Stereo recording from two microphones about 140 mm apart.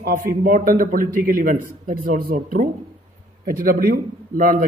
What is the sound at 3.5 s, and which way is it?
A man's voice, 90° right.